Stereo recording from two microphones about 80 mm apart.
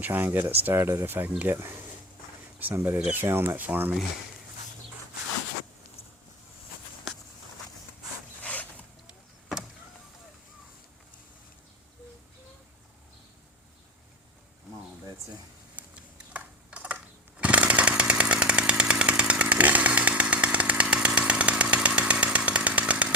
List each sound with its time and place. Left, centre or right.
0.0 s speech: right
2.7 s speech: right
8.4 s zipper: centre
9.0 s vehicle: centre
15.7 s a sound: centre